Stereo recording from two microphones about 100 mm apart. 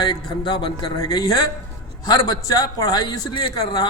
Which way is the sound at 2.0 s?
35° left (ahead or behind).